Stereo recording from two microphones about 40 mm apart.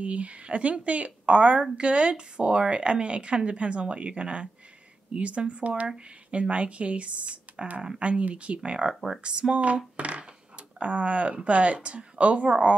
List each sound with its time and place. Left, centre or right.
0.0 s a woman's voice: right
9.9 s coin: right